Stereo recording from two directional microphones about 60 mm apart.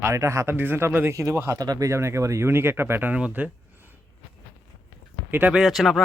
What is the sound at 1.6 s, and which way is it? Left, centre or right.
Speech, right.